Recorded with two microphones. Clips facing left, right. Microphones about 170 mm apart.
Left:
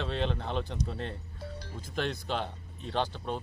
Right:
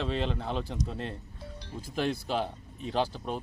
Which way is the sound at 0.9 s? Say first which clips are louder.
Right 1 dB; centre (ahead or behind).